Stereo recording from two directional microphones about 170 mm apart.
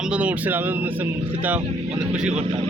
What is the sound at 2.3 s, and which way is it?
Speech, 35° right (ahead or behind).